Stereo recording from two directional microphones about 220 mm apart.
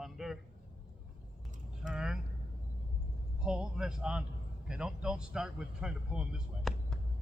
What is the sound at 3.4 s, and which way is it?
Speech, 5° right (ahead or behind).